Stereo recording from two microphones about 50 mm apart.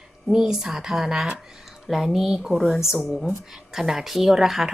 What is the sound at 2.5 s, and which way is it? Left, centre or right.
Speech, centre.